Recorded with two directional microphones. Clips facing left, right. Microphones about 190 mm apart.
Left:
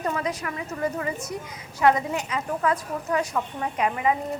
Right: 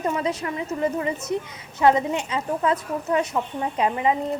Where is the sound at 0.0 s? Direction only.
25° right (ahead or behind).